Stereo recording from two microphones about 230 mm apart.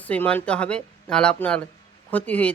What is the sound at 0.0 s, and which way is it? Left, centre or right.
A woman's voice, centre.